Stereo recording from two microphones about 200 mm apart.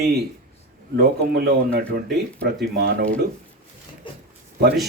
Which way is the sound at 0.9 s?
55° right (ahead or behind).